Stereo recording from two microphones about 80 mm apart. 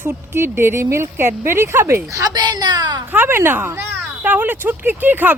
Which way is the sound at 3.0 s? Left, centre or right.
Right.